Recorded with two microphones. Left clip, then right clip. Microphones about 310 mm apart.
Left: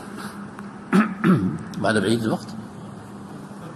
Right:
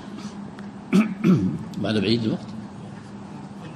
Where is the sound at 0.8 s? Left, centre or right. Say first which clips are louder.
Left 2 dB; centre.